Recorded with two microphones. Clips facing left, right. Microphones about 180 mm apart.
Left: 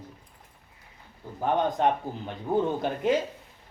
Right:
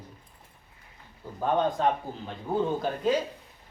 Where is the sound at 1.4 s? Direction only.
20° left (ahead or behind).